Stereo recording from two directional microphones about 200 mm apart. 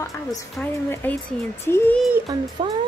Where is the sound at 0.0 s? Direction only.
15° left (ahead or behind).